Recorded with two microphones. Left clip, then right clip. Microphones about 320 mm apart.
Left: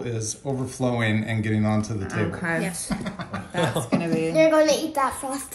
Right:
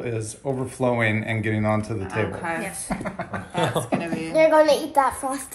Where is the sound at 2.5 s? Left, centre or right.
Centre.